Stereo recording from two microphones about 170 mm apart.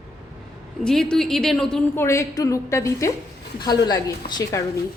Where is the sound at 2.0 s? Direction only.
15° left (ahead or behind).